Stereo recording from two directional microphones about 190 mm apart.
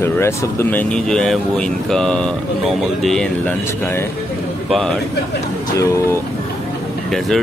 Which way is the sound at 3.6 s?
15° left (ahead or behind).